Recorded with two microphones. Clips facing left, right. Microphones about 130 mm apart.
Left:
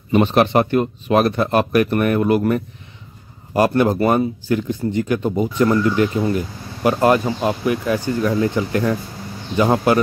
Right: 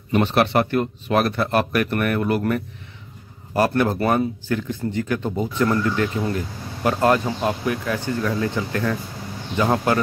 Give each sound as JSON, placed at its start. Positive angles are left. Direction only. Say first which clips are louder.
{"t": 0.1, "sound": "speech", "louder": "left 4 dB", "side_deg": 15}